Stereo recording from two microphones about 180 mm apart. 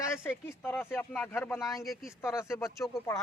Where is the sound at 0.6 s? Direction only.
10° left (ahead or behind).